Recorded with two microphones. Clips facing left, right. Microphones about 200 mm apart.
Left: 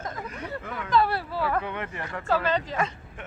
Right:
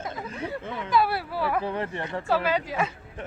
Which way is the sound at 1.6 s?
35° right (ahead or behind).